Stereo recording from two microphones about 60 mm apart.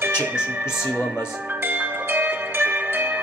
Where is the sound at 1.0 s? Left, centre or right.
Right.